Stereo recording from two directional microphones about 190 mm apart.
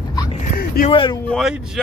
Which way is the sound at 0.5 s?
50° left (ahead or behind).